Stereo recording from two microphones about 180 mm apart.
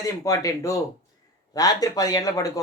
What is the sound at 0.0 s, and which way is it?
Speech, 20° left (ahead or behind).